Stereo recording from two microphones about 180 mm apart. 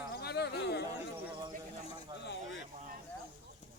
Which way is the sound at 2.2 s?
75° left (ahead or behind).